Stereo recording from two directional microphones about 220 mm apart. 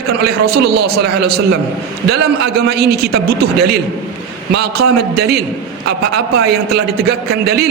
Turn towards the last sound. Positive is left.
turn(degrees=-45)  # may be behind; listen again after turning